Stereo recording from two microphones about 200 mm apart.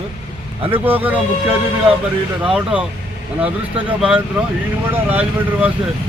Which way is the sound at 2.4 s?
5° right (ahead or behind).